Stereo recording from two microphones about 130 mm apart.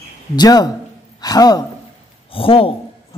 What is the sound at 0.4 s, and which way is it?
A man's voice, 30° left (ahead or behind).